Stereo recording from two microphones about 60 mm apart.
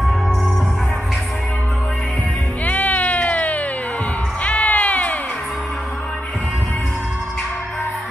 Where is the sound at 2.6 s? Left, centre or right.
Left.